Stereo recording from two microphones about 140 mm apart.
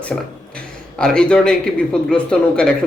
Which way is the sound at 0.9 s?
5° left (ahead or behind).